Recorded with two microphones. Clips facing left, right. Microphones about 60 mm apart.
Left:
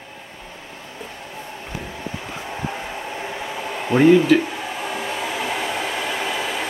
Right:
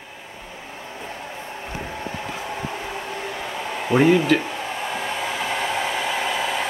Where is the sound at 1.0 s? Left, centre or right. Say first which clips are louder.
Right 1 dB; centre.